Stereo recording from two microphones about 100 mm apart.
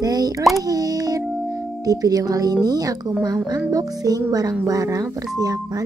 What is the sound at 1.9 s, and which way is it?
Speech, 40° right (ahead or behind).